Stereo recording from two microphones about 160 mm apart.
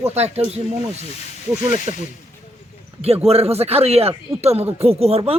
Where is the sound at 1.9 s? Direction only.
30° right (ahead or behind).